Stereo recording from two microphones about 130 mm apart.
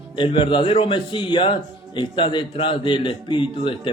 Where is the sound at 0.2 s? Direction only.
40° left (ahead or behind).